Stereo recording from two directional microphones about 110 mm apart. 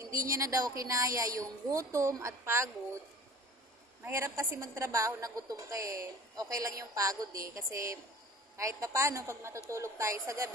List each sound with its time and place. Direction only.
0.1 s a woman's voice: 30° right (ahead or behind)
4.0 s a woman's voice: 25° right (ahead or behind)